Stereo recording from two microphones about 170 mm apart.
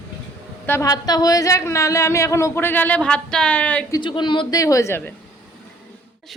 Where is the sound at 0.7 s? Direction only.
20° left (ahead or behind).